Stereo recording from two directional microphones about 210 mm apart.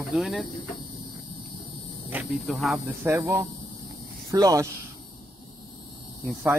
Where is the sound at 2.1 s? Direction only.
5° right (ahead or behind).